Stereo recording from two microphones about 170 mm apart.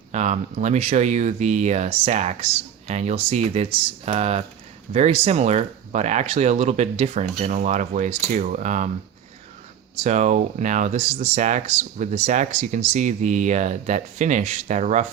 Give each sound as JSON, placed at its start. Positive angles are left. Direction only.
{"t": 0.1, "sound": "speech", "side_deg": -45}
{"t": 10.0, "sound": "speech", "side_deg": -45}